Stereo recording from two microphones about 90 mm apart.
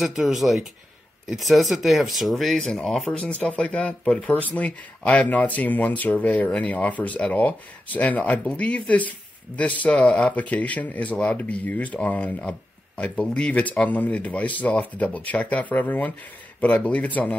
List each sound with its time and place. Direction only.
0.0 s speech: 5° right (ahead or behind)
3.3 s speech: 15° left (ahead or behind)